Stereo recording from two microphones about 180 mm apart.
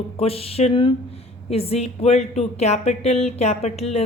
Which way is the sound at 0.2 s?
35° left (ahead or behind).